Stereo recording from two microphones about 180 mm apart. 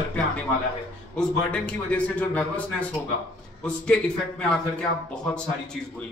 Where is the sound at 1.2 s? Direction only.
5° left (ahead or behind).